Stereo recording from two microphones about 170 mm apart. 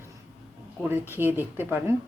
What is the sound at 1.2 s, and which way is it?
Speech, 10° right (ahead or behind).